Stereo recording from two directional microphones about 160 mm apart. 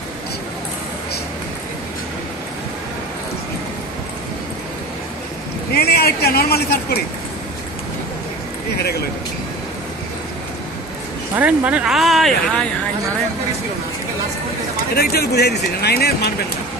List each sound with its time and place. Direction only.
5.8 s speech: 80° left
8.7 s speech: 85° left
11.3 s speech: 10° right (ahead or behind)
15.0 s speech: 80° left